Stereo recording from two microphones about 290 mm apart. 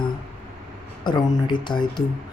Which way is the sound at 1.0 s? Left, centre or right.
Centre.